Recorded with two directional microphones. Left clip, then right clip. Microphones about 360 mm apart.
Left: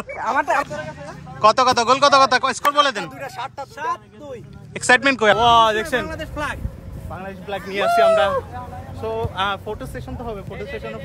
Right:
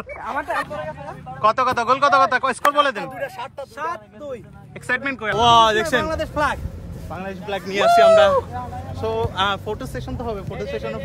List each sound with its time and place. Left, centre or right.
0.2 s speech: left
1.4 s speech: centre
6.0 s speech: centre
7.1 s speech: centre